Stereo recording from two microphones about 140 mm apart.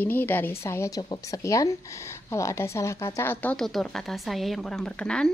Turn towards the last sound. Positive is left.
turn(degrees=5)  # may be behind; listen again after turning